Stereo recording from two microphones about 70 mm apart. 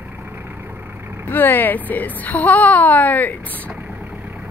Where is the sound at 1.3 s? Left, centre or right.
Left.